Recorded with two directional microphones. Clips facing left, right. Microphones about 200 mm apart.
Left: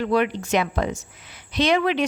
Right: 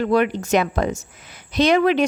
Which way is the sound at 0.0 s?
45° right (ahead or behind).